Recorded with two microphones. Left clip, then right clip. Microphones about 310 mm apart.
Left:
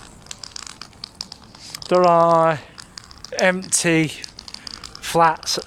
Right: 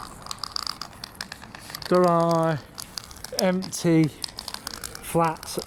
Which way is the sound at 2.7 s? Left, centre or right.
Right.